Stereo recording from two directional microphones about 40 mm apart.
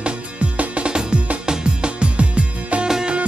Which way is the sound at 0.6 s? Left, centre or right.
Right.